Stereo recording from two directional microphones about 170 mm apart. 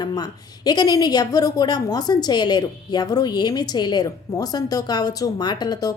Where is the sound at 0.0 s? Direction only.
25° left (ahead or behind).